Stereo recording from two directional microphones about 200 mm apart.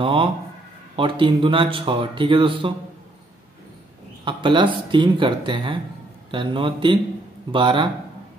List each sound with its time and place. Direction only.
0.0 s a sound: 25° right (ahead or behind)
0.9 s speech: 25° right (ahead or behind)
4.2 s speech: 25° right (ahead or behind)